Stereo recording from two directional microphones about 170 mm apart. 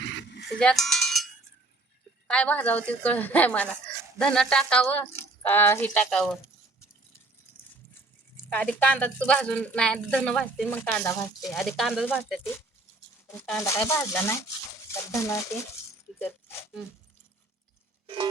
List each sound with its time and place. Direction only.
0.0 s a sound: 90° left
0.6 s cowbell: 5° left (ahead or behind)
2.2 s speech: 5° left (ahead or behind)
8.5 s speech: 10° left (ahead or behind)
11.4 s speech: centre (ahead or behind)
13.3 s speech: 5° left (ahead or behind)
18.0 s a sound: 35° right (ahead or behind)